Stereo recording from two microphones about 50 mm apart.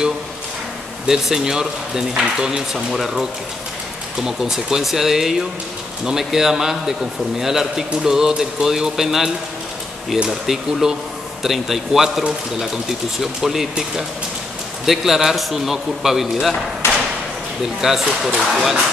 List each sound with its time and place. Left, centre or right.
1.0 s a man's voice: centre
10.4 s a man's voice: centre
16.8 s a sound: left
17.7 s a man's voice: centre